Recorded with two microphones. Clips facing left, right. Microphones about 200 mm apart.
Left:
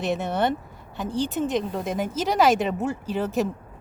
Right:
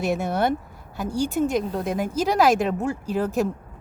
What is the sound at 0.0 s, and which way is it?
Speech, 5° right (ahead or behind).